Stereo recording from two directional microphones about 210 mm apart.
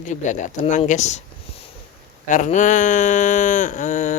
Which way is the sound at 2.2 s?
35° left (ahead or behind).